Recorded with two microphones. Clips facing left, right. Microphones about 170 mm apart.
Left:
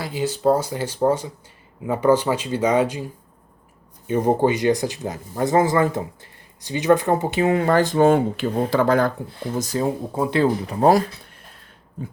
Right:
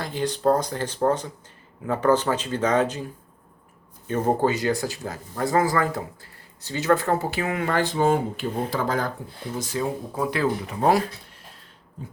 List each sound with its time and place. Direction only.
0.0 s speech: 5° left (ahead or behind); by 7.9 s 40° left (ahead or behind)
7.9 s speech: 65° left (ahead or behind)
9.6 s speech: 40° left (ahead or behind)
10.2 s speech: 25° left (ahead or behind)